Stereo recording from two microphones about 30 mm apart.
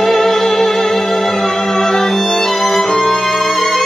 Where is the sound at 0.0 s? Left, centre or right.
Centre.